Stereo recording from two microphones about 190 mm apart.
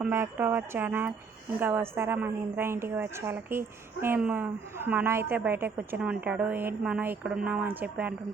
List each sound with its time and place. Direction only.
0.0 s a woman's voice: 10° right (ahead or behind)